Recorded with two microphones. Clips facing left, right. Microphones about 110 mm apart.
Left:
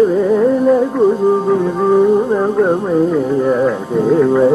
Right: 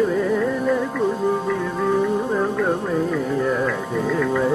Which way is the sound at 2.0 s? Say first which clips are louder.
Left 8 dB; 30° left (ahead or behind).